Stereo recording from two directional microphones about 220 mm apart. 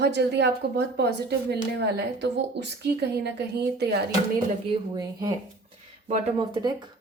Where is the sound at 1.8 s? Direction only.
50° right (ahead or behind).